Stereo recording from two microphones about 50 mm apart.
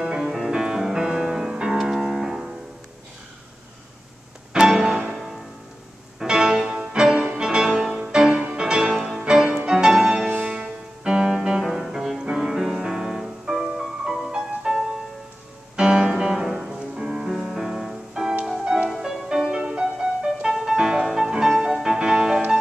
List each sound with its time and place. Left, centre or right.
0.0 s music: centre
4.6 s music: centre
8.9 s music: centre
9.2 s music: centre
20.5 s music: centre